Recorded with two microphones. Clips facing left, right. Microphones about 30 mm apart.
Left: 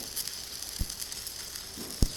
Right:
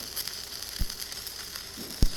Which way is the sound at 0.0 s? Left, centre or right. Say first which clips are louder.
Right 2 dB; right.